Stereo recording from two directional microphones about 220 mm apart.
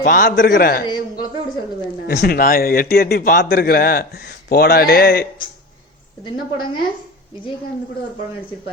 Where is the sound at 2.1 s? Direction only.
45° left (ahead or behind).